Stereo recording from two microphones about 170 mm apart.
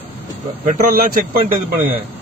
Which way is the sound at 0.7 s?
55° right (ahead or behind).